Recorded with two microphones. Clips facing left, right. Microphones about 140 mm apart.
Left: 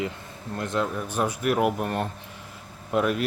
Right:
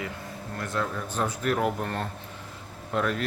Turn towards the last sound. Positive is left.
turn(degrees=10)  # may be behind; listen again after turning